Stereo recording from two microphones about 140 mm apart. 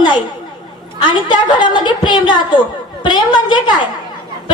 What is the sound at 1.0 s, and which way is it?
A woman's voice, 35° left (ahead or behind).